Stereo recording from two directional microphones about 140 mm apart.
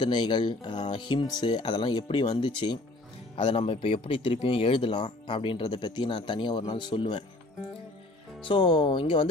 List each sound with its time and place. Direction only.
0.0 s speech: 35° left (ahead or behind)
8.5 s speech: 35° left (ahead or behind)